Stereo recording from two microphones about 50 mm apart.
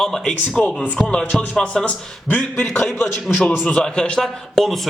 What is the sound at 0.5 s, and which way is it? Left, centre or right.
A man's voice, left.